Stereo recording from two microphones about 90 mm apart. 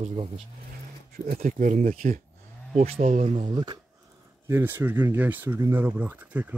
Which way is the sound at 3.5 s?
50° right (ahead or behind).